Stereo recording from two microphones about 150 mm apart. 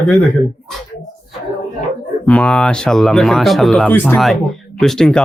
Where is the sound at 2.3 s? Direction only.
10° left (ahead or behind).